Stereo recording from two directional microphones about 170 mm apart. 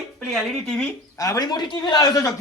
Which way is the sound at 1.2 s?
20° left (ahead or behind).